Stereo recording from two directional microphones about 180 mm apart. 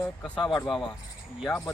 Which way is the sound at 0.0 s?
Centre (ahead or behind).